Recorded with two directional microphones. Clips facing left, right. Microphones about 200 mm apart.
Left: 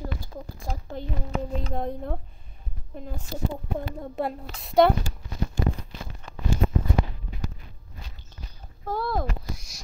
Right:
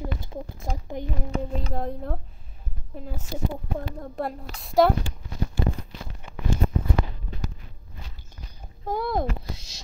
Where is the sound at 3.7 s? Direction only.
5° left (ahead or behind).